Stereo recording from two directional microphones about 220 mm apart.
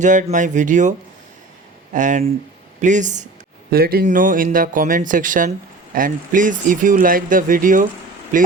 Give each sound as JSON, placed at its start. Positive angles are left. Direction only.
{"t": 0.0, "sound": "speech", "side_deg": -35}
{"t": 3.7, "sound": "speech", "side_deg": -45}